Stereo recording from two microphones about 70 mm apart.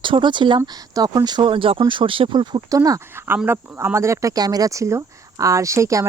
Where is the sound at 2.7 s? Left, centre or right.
Right.